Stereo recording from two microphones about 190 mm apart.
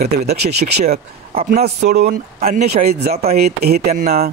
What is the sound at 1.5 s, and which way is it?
A man's voice, 55° right (ahead or behind).